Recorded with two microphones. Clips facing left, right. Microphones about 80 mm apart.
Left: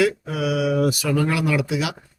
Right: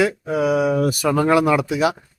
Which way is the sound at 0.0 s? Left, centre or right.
Right.